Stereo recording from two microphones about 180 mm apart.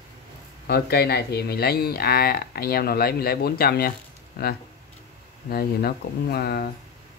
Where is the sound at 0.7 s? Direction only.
65° left (ahead or behind).